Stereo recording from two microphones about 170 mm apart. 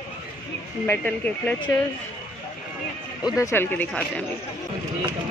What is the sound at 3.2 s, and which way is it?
Speech, 20° left (ahead or behind).